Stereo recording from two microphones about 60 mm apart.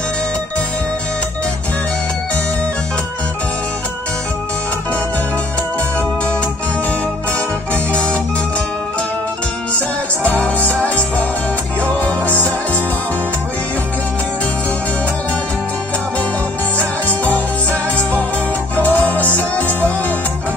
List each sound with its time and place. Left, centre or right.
10.7 s music: left
18.8 s music: left